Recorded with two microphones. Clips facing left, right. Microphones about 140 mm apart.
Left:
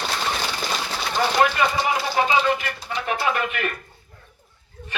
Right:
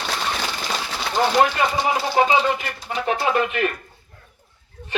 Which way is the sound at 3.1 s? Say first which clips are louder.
Right 3 dB; 30° right (ahead or behind).